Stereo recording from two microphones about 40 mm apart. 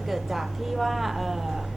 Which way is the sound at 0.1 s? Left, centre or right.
Centre.